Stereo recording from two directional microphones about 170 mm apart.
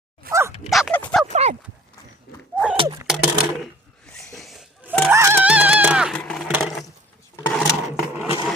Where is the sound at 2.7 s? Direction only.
30° right (ahead or behind).